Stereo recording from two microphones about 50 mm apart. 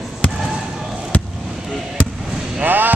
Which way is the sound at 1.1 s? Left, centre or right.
Left.